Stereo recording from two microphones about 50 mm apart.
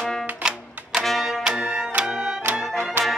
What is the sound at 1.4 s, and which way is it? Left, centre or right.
Music, centre.